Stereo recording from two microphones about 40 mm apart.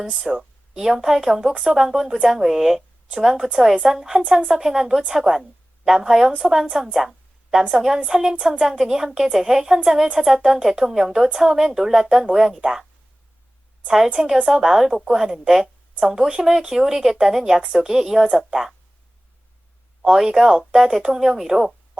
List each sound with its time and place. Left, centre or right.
0.3 s a woman's voice: centre
6.9 s a sound: centre
7.7 s a woman's voice: centre
13.8 s a woman's voice: centre
20.0 s a woman's voice: centre